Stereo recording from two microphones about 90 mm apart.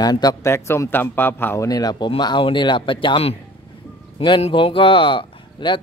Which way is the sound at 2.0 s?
60° left (ahead or behind).